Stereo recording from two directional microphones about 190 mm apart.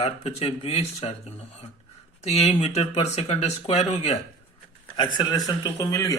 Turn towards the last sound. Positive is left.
turn(degrees=15)  # may be behind; listen again after turning